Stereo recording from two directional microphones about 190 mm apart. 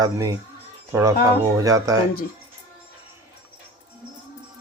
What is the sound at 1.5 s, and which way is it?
Speech, 15° right (ahead or behind).